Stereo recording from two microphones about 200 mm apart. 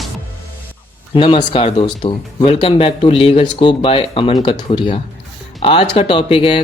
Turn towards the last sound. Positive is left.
turn(degrees=25)  # may be behind; listen again after turning